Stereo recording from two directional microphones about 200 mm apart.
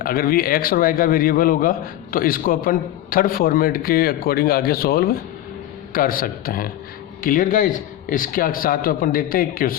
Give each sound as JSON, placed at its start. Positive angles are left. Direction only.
{"t": 0.0, "sound": "a man's voice", "side_deg": 45}